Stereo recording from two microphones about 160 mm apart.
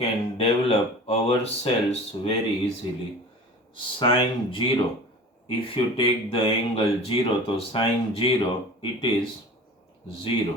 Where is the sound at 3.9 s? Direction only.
30° left (ahead or behind).